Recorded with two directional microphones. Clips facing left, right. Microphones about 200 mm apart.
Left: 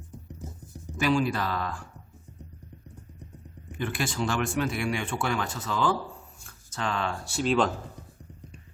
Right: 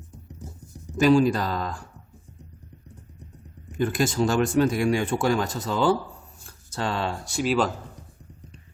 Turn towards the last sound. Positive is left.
turn(degrees=-5)  # may be behind; listen again after turning